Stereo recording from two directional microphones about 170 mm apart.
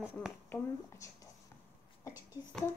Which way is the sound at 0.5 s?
20° left (ahead or behind).